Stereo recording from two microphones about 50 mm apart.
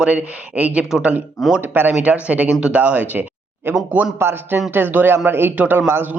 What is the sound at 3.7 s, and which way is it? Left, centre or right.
Speech, right.